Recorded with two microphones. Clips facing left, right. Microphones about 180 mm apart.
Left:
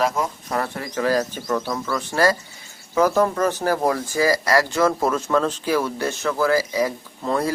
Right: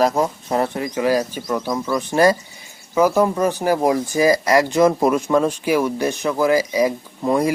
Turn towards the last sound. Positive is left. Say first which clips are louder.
# right 4 dB
turn(degrees=-15)  # may be behind; listen again after turning